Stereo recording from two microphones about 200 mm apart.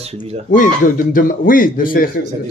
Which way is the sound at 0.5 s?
40° left (ahead or behind).